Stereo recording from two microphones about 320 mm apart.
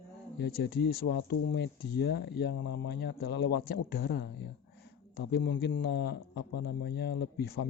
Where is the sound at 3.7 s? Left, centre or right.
Left.